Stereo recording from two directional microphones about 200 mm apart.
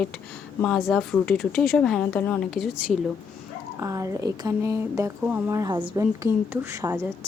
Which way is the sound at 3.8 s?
15° right (ahead or behind).